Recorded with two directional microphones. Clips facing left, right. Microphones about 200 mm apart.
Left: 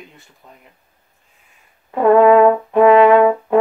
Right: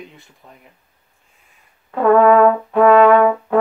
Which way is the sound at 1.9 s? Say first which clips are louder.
Left 1 dB; 15° left (ahead or behind).